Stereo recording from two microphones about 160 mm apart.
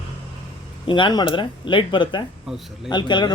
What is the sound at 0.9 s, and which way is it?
Speech, 30° left (ahead or behind).